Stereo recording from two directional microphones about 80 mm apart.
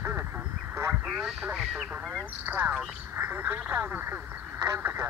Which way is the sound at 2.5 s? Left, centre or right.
Right.